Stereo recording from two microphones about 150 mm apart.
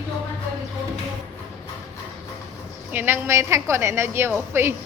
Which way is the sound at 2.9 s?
15° right (ahead or behind).